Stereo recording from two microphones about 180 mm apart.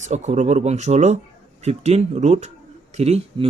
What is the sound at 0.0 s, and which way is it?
A man's voice, 40° right (ahead or behind).